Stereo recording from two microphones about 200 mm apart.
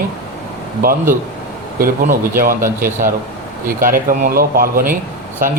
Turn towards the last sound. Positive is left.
turn(degrees=-45)  # may be behind; listen again after turning